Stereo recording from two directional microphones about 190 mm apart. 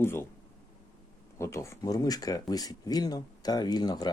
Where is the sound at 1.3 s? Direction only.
15° left (ahead or behind).